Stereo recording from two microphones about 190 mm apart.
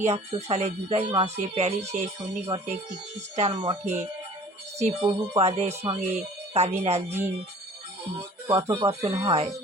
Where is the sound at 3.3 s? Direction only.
35° right (ahead or behind).